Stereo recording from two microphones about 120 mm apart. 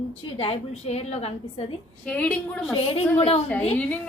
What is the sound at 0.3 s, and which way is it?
A woman's voice, 55° left (ahead or behind).